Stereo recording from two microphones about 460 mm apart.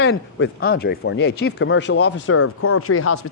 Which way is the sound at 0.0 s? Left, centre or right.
Left.